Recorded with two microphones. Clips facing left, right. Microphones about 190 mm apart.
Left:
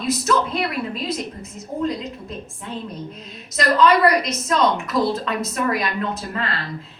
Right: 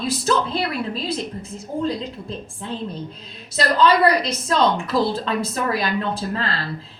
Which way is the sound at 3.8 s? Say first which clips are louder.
Left 1 dB; 30° right (ahead or behind).